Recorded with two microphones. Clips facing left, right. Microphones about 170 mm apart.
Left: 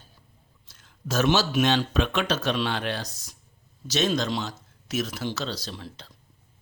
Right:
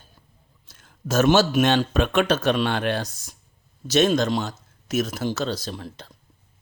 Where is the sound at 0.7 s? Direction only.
50° right (ahead or behind).